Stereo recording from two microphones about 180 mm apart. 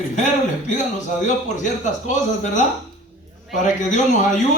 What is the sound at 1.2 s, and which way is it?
A man's voice, 45° left (ahead or behind).